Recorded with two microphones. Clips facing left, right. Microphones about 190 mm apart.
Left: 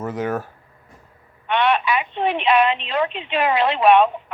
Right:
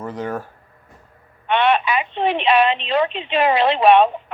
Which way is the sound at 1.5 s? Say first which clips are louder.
Right 2 dB; 30° right (ahead or behind).